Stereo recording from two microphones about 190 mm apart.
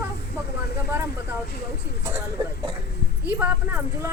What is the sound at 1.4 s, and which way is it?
Speech, 50° left (ahead or behind).